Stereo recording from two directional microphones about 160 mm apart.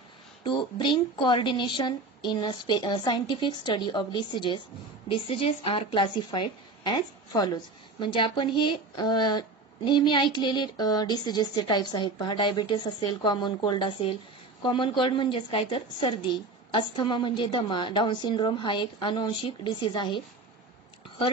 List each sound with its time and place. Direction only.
0.4 s a woman's voice: 30° left (ahead or behind)